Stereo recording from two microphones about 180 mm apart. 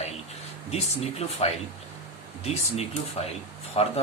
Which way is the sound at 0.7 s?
35° left (ahead or behind).